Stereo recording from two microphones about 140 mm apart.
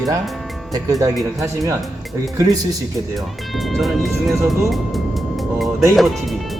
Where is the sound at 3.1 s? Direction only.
Centre (ahead or behind).